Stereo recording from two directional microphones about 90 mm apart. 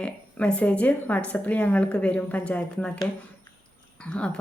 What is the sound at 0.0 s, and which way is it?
A woman's voice, 15° left (ahead or behind).